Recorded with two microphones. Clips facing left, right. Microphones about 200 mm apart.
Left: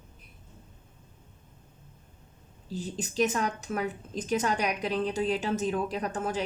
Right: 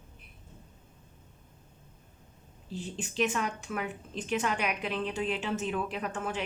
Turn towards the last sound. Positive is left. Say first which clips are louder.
# left 3 dB
turn(degrees=40)  # may be behind; listen again after turning